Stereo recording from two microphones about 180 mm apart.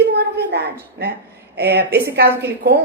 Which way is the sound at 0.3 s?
65° right (ahead or behind).